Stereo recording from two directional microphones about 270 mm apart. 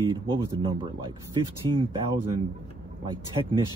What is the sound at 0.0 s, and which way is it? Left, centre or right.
Speech, centre.